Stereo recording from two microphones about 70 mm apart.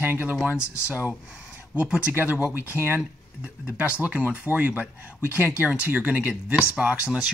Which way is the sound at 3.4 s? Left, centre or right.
Centre.